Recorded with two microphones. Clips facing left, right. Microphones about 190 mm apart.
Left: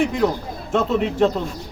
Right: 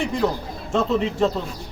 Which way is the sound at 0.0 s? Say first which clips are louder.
Left 3 dB; centre (ahead or behind).